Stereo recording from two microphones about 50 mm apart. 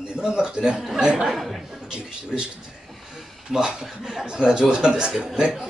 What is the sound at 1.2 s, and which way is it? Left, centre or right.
Speech, centre.